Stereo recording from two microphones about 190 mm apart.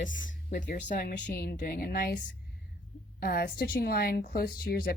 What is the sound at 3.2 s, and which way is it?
A woman's voice, 50° left (ahead or behind).